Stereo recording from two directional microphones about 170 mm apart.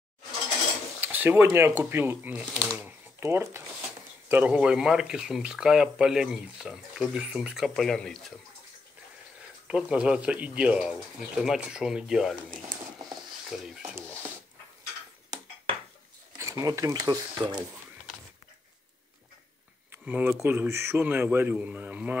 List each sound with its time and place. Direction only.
1.0 s a man's voice: 10° right (ahead or behind)
3.2 s a man's voice: 15° right (ahead or behind); by 8.3 s 5° left (ahead or behind)
9.7 s speech: 5° right (ahead or behind)
13.5 s speech: centre (ahead or behind)
16.3 s speech: 20° right (ahead or behind)
19.9 s a man's voice: 10° right (ahead or behind)